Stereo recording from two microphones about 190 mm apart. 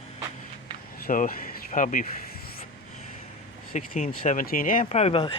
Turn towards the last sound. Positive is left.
turn(degrees=30)  # may be behind; listen again after turning